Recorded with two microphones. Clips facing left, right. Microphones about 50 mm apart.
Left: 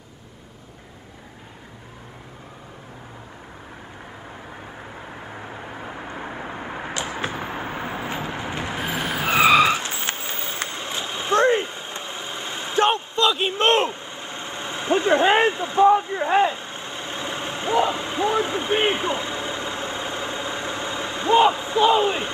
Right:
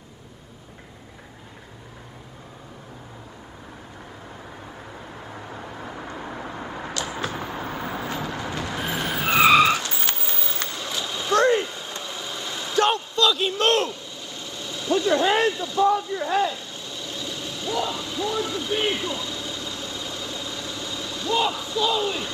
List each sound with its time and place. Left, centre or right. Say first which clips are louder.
4.9 s vehicle: left 2 dB; left
8.8 s skidding: left 1 dB; centre
9.8 s a sound: left 1 dB; left